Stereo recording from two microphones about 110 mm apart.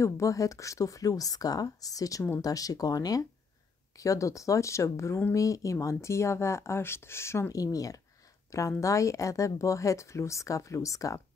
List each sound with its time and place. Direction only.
0.0 s speech: 30° left (ahead or behind)